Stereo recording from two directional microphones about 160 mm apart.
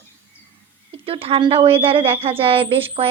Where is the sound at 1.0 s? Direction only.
35° right (ahead or behind).